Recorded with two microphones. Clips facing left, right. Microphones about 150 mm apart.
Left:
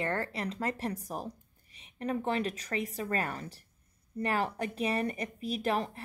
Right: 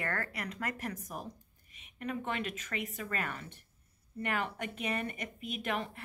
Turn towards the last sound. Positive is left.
turn(degrees=35)  # may be behind; listen again after turning